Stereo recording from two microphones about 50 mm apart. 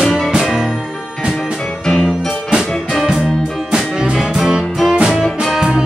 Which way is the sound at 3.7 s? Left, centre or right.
Centre.